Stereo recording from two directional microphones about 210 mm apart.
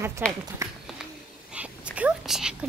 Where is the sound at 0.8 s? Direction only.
5° right (ahead or behind).